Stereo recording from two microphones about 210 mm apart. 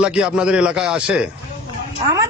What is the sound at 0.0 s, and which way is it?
A man's voice, 5° right (ahead or behind).